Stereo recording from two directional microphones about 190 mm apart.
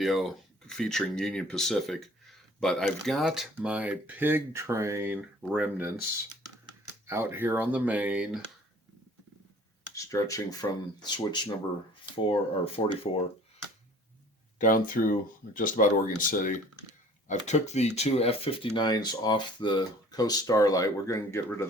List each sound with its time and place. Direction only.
0.0 s speech: centre (ahead or behind)
9.9 s speech: 15° left (ahead or behind)
14.6 s speech: 45° left (ahead or behind); by 21.7 s 15° left (ahead or behind)